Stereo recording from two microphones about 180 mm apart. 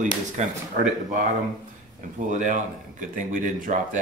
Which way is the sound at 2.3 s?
45° right (ahead or behind).